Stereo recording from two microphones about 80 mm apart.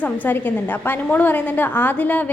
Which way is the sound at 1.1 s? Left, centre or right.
Left.